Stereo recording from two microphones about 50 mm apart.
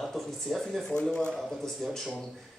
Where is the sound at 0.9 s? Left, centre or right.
Centre.